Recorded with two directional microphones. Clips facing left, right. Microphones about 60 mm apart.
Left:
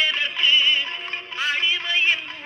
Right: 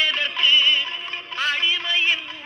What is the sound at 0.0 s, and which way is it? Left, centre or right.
Music, left.